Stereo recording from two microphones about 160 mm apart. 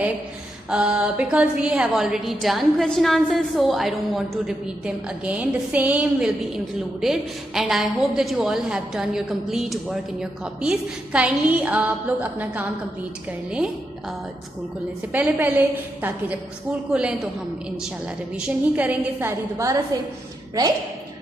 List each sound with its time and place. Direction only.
0.7 s a woman's voice: 5° right (ahead or behind)
15.1 s a woman's voice: 10° right (ahead or behind)
18.3 s a woman's voice: 10° right (ahead or behind)